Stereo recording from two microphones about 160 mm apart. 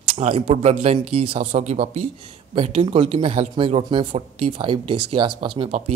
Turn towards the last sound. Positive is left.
turn(degrees=-35)  # may be behind; listen again after turning